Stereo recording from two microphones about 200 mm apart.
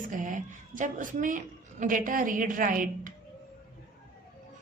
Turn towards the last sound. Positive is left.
turn(degrees=-40)  # may be behind; listen again after turning